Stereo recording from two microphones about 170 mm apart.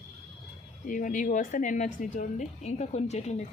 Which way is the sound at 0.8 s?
50° left (ahead or behind).